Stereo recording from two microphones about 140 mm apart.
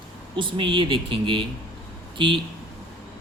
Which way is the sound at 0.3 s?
35° right (ahead or behind).